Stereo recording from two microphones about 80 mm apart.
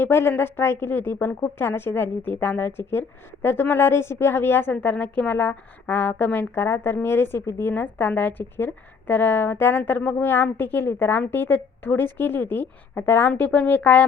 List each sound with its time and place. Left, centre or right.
0.0 s a woman's voice: left